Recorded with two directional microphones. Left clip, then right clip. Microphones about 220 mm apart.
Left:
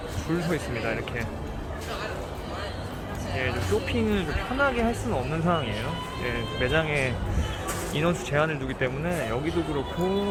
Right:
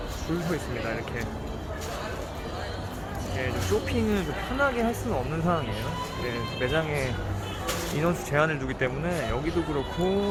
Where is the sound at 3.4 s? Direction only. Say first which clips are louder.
Left 1 dB; centre (ahead or behind).